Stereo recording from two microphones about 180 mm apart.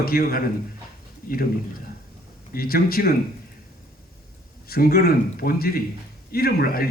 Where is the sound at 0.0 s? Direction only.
55° left (ahead or behind).